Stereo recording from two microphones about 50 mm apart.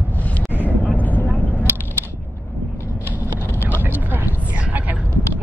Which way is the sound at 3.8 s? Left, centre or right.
Right.